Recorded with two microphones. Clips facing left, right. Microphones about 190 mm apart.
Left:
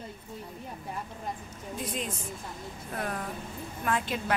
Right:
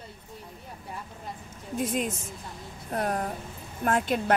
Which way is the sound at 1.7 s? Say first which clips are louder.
Right 7 dB; 50° right (ahead or behind).